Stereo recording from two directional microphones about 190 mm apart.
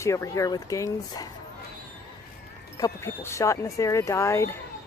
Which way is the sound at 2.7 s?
15° left (ahead or behind).